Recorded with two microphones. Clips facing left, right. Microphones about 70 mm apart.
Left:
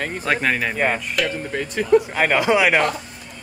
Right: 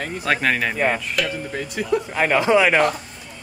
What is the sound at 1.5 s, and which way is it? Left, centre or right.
Speech, left.